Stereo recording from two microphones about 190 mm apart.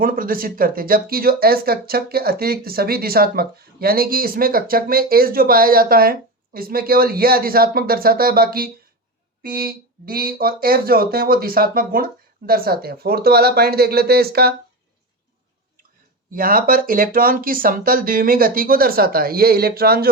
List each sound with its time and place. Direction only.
0.0 s speech: 50° right (ahead or behind)
16.3 s speech: 50° right (ahead or behind)